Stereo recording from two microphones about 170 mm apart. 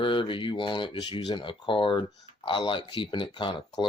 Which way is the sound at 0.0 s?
30° left (ahead or behind).